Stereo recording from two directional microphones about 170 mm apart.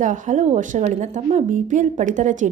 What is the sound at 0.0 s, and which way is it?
A woman's voice, 45° right (ahead or behind).